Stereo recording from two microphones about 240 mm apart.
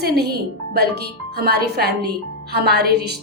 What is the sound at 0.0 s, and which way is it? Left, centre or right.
A woman's voice, right.